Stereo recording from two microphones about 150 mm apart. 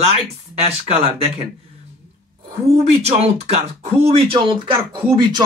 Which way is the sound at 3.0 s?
45° right (ahead or behind).